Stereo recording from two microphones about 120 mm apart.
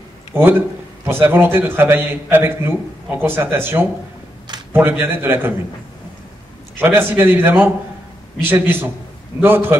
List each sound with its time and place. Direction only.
0.3 s a man's voice: 15° right (ahead or behind)
6.8 s a man's voice: 20° right (ahead or behind)